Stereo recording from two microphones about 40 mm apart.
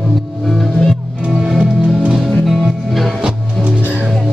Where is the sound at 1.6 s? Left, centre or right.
Right.